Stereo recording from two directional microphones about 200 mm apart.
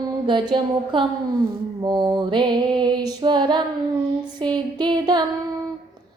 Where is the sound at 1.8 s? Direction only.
20° right (ahead or behind).